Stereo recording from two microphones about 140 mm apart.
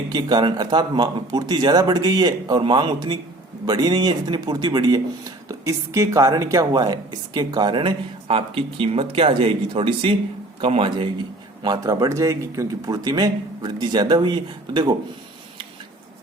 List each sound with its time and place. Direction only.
0.1 s a man's voice: 30° right (ahead or behind)